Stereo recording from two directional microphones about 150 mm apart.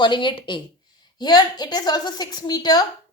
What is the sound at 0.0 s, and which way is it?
A woman's voice, 30° left (ahead or behind).